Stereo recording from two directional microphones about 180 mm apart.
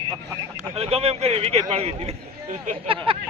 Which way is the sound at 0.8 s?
35° right (ahead or behind).